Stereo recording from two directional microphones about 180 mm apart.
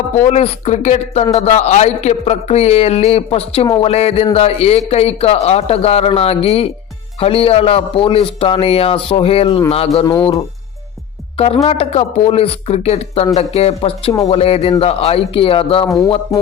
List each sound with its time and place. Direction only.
0.3 s a man's voice: 35° left (ahead or behind)
11.3 s a man's voice: 30° left (ahead or behind)